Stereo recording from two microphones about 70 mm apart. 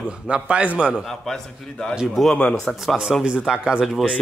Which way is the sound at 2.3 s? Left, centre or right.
Centre.